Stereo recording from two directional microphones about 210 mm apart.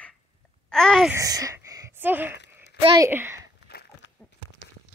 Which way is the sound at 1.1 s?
15° right (ahead or behind).